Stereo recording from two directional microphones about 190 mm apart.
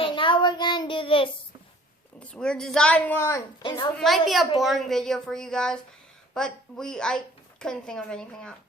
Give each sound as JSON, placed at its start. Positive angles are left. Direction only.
{"t": 0.0, "sound": "child singing", "side_deg": 25}
{"t": 2.2, "sound": "a woman's voice", "side_deg": 5}
{"t": 3.6, "sound": "a woman's voice", "side_deg": 25}
{"t": 3.9, "sound": "a woman's voice", "side_deg": 0}